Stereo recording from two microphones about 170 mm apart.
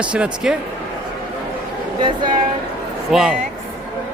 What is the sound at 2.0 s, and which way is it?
Speech, 30° right (ahead or behind).